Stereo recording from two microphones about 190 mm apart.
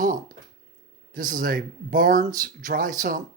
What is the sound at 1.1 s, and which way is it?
Speech, 45° right (ahead or behind).